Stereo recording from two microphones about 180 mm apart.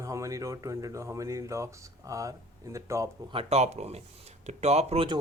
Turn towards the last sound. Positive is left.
turn(degrees=-35)  # may be behind; listen again after turning